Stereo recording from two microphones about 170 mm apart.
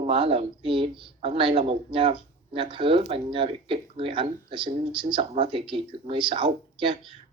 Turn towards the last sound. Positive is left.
turn(degrees=-30)  # may be behind; listen again after turning